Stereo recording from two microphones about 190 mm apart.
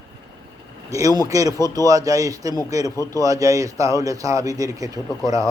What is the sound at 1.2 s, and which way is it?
A man's voice, 20° right (ahead or behind).